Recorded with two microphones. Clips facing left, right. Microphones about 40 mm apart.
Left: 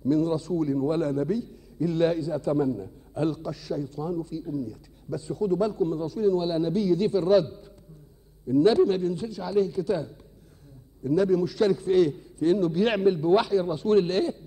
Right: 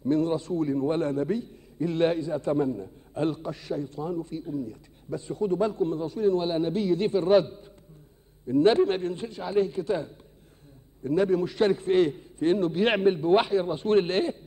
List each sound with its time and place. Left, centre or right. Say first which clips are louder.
0.0 s a man's voice: left 1 dB; right